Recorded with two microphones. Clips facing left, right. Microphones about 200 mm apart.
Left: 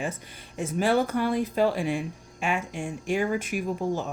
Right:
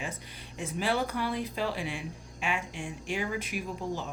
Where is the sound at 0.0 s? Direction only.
45° left (ahead or behind).